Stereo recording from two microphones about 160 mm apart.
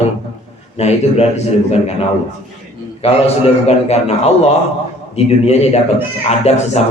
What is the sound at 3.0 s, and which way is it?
A man's voice, 40° left (ahead or behind).